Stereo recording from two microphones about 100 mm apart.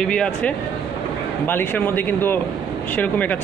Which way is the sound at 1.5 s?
20° left (ahead or behind).